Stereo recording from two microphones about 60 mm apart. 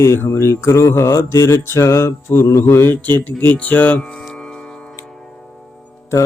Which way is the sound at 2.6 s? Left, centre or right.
Left.